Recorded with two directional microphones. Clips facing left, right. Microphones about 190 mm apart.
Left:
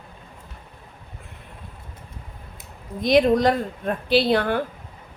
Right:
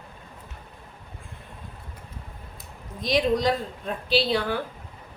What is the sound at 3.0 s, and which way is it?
A woman's voice, 55° left (ahead or behind).